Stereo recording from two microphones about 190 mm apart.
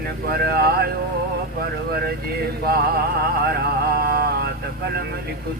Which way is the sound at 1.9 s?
55° right (ahead or behind).